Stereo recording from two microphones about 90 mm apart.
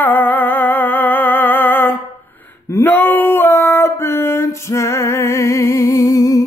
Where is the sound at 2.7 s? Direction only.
25° left (ahead or behind).